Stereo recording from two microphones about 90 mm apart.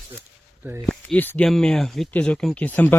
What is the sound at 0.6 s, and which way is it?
Speech, 25° right (ahead or behind).